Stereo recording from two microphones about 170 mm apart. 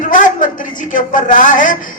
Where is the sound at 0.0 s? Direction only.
50° left (ahead or behind).